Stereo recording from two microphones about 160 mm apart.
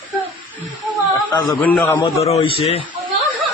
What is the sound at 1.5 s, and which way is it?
Speech, 10° left (ahead or behind).